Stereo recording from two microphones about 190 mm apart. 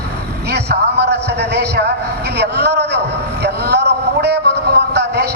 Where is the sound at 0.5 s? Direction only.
60° right (ahead or behind).